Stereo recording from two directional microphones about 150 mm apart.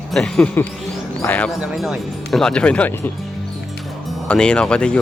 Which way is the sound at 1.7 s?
Centre (ahead or behind).